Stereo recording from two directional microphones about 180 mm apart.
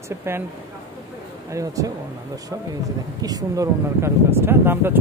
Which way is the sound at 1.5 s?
20° right (ahead or behind).